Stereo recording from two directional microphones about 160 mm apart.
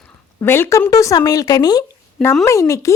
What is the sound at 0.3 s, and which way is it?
A woman's voice, 15° left (ahead or behind).